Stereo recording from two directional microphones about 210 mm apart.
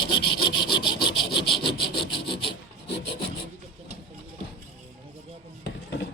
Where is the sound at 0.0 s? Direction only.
20° left (ahead or behind).